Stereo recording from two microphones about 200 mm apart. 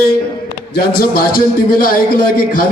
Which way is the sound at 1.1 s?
45° left (ahead or behind).